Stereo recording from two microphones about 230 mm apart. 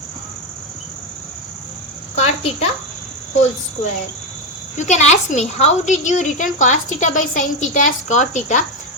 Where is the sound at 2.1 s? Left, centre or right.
Left.